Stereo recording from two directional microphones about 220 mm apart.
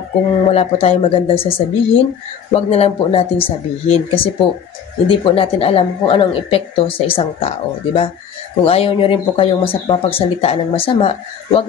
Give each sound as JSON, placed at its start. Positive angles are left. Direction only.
{"t": 0.5, "sound": "a woman's voice", "side_deg": 25}